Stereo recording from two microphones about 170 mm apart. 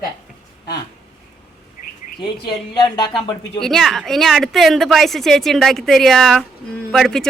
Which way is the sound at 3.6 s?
Centre (ahead or behind).